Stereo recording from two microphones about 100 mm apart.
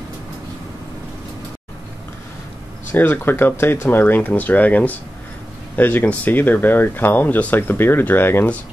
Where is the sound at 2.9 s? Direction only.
20° left (ahead or behind).